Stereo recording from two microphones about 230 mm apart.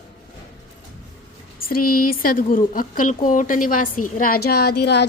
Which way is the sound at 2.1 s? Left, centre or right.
Left.